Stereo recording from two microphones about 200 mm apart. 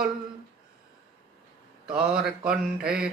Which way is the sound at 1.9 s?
5° right (ahead or behind).